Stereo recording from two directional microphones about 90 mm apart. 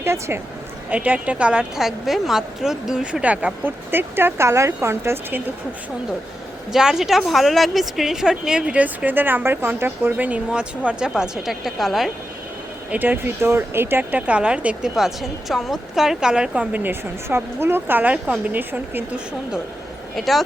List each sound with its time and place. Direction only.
0.0 s a woman's voice: 30° right (ahead or behind)
0.9 s a woman's voice: 15° right (ahead or behind)
6.7 s a woman's voice: 5° right (ahead or behind)
12.9 s a woman's voice: 20° right (ahead or behind)
14.9 s a woman's voice: 5° right (ahead or behind); by 19.2 s 20° right (ahead or behind)
20.1 s speech: centre (ahead or behind)